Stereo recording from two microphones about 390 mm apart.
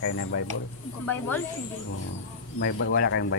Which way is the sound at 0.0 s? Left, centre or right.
Left.